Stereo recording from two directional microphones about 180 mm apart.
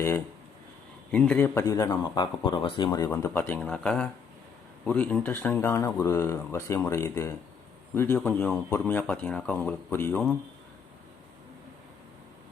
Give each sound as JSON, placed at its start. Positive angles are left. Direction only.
{"t": 1.1, "sound": "speech", "side_deg": 5}
{"t": 3.1, "sound": "speech", "side_deg": 10}